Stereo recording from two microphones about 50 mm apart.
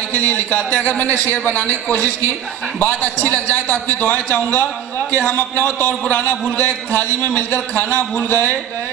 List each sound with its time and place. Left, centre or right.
0.5 s a man's voice: left